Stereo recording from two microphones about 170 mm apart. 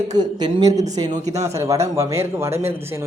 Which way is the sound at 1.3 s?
40° right (ahead or behind).